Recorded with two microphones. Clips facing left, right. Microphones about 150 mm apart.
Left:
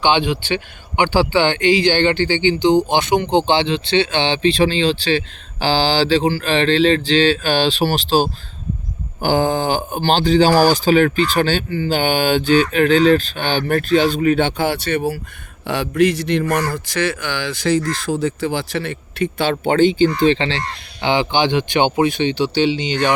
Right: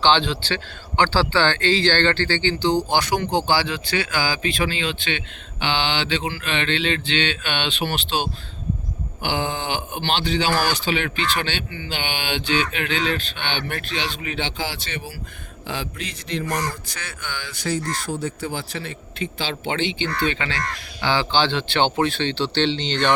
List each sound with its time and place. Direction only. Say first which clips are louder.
0.0 s speech: left 3 dB; 15° left (ahead or behind); by 20.1 s 45° left (ahead or behind)
20.2 s speech: left 8 dB; 30° left (ahead or behind); by 23.1 s 10° left (ahead or behind)